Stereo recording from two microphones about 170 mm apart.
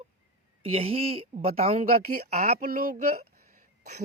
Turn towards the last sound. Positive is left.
turn(degrees=-50)  # may be behind; listen again after turning